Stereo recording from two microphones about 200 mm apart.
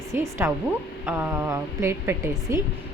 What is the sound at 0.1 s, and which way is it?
Speech, 10° right (ahead or behind).